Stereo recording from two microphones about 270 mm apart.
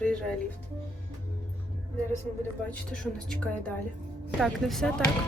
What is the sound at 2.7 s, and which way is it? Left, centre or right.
Speech, centre.